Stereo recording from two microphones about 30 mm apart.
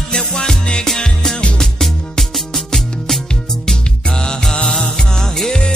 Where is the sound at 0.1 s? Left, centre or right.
Centre.